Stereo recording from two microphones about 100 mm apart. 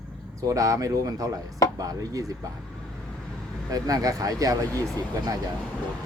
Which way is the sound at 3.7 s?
35° right (ahead or behind).